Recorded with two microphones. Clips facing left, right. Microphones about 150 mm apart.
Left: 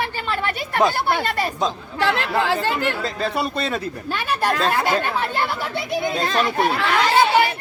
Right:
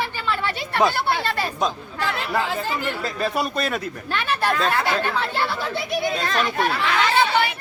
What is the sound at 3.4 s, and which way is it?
Speech, 25° left (ahead or behind).